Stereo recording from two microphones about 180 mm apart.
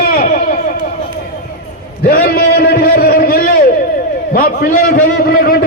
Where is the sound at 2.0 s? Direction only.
55° left (ahead or behind).